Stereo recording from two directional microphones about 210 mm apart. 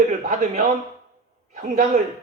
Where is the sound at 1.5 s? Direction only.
40° right (ahead or behind).